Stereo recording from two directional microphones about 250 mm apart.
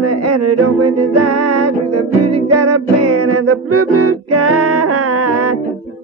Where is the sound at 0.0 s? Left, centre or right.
Right.